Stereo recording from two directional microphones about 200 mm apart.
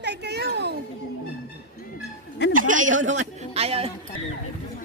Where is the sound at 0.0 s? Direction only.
55° right (ahead or behind).